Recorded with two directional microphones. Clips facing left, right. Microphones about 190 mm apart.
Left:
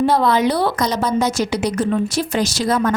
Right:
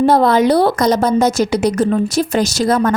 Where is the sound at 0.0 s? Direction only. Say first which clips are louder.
Right 4 dB; 45° right (ahead or behind).